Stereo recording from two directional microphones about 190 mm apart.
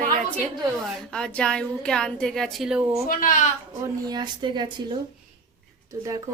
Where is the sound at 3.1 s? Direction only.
45° left (ahead or behind).